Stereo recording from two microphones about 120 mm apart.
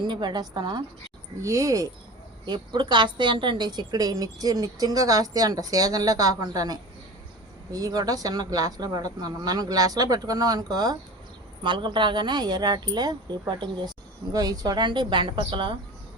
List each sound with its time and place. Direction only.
0.1 s a woman's voice: 40° right (ahead or behind)
1.4 s speech: 25° right (ahead or behind)
2.5 s a woman's voice: 40° right (ahead or behind)